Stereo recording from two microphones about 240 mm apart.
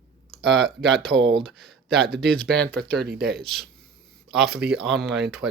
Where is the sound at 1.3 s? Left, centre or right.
Centre.